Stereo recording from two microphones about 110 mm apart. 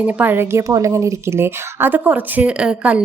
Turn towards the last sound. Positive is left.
turn(degrees=-10)  # may be behind; listen again after turning